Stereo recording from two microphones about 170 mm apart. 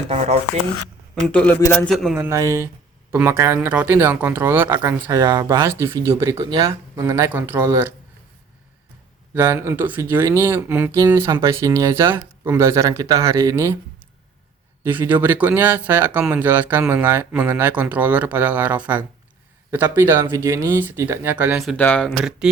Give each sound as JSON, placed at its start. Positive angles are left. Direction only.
{"t": 1.3, "sound": "a man's voice", "side_deg": 10}
{"t": 2.1, "sound": "speech", "side_deg": -15}
{"t": 6.9, "sound": "speech", "side_deg": -15}
{"t": 9.3, "sound": "speech", "side_deg": -15}
{"t": 14.8, "sound": "speech", "side_deg": -10}
{"t": 21.8, "sound": "speech", "side_deg": 10}